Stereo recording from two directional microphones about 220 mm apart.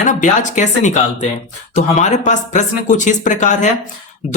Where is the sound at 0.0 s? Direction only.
35° left (ahead or behind).